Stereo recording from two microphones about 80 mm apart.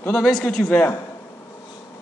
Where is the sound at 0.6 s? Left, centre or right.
Left.